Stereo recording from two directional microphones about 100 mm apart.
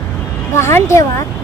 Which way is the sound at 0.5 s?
30° left (ahead or behind).